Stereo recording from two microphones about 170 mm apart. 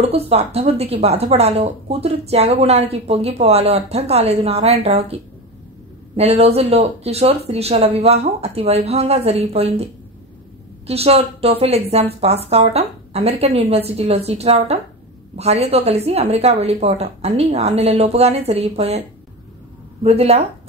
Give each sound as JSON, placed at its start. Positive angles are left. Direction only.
{"t": 0.0, "sound": "speech", "side_deg": -35}
{"t": 6.1, "sound": "speech", "side_deg": -35}
{"t": 10.9, "sound": "speech", "side_deg": -35}